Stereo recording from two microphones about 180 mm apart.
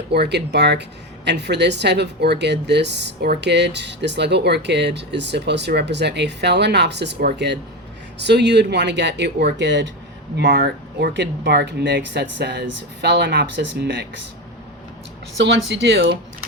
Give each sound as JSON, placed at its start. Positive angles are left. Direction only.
{"t": 0.1, "sound": "speech", "side_deg": -70}
{"t": 10.3, "sound": "speech", "side_deg": -65}
{"t": 15.4, "sound": "speech", "side_deg": -80}